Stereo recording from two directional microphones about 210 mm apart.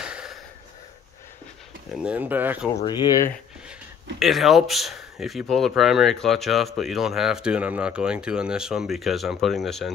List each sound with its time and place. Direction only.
0.0 s a sound: 5° right (ahead or behind)
1.9 s speech: 5° right (ahead or behind)
2.8 s speech: 20° left (ahead or behind)
4.2 s speech: centre (ahead or behind)